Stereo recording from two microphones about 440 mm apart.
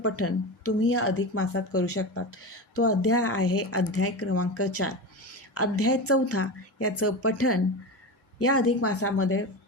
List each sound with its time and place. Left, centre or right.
0.0 s speech: left